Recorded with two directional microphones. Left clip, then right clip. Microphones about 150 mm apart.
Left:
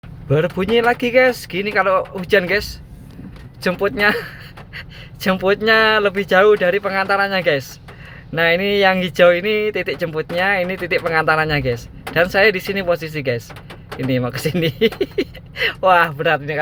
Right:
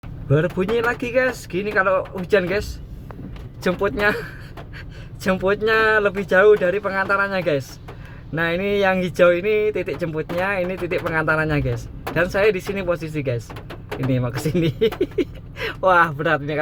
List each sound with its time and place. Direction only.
0.4 s speech: 35° left (ahead or behind)
1.1 s speech: 20° left (ahead or behind)
3.7 s speech: 10° left (ahead or behind)
16.2 s a man's voice: 5° left (ahead or behind)